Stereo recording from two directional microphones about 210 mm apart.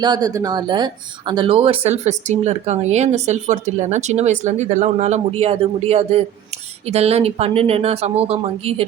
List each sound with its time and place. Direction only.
0.0 s speech: 20° right (ahead or behind)